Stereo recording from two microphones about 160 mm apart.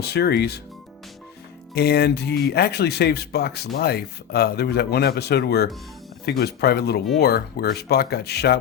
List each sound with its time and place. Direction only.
0.0 s speech: 90° left
1.7 s speech: 90° left
7.2 s speech: 75° left (ahead or behind)